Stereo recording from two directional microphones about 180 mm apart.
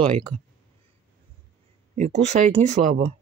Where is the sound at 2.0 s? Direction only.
40° right (ahead or behind).